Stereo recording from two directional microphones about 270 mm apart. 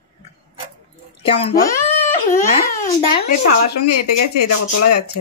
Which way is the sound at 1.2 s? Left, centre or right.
Centre.